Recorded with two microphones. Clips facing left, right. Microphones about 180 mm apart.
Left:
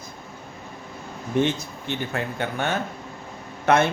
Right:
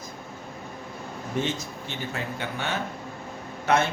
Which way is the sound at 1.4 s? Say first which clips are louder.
Left 6 dB; 60° left (ahead or behind).